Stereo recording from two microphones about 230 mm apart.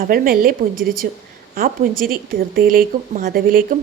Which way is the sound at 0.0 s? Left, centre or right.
Right.